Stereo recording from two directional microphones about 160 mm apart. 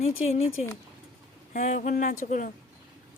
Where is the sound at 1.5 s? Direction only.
50° left (ahead or behind).